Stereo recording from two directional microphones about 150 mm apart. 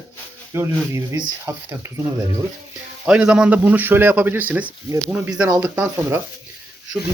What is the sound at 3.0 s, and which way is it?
Speech, 5° right (ahead or behind).